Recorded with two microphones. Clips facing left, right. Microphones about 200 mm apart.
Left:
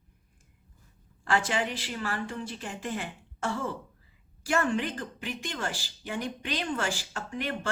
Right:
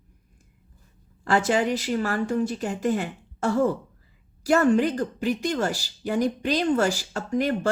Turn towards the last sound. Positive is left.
turn(degrees=-40)  # may be behind; listen again after turning